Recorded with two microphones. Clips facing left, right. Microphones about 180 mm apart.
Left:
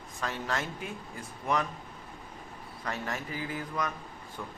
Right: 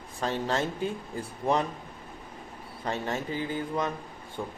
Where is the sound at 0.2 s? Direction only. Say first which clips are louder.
Right 5 dB; 30° right (ahead or behind).